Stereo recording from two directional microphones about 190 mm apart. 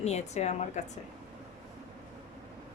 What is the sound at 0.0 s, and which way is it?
Speech, 35° left (ahead or behind).